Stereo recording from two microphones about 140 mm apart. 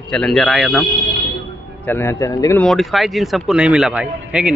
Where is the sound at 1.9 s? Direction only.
15° left (ahead or behind).